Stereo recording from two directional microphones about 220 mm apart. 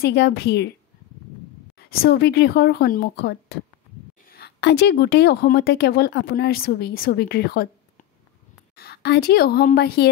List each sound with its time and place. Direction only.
0.0 s a woman's voice: 50° left (ahead or behind)
1.8 s a woman's voice: 45° left (ahead or behind)
8.7 s a woman's voice: 45° left (ahead or behind)